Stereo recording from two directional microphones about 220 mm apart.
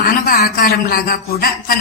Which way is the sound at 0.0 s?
40° left (ahead or behind).